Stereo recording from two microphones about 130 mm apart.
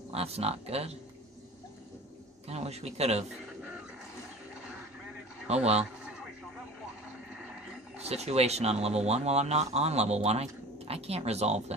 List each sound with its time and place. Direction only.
0.1 s speech: 50° right (ahead or behind)
2.4 s speech: 55° right (ahead or behind)
5.5 s speech: 55° right (ahead or behind)
8.0 s speech: 55° right (ahead or behind)